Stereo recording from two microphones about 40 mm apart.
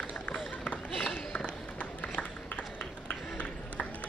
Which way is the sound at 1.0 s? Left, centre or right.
Left.